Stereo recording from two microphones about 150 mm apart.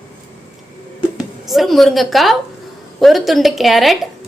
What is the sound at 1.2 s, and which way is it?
A woman's voice, centre (ahead or behind).